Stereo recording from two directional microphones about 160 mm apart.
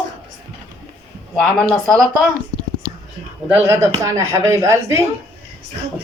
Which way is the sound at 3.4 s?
15° right (ahead or behind).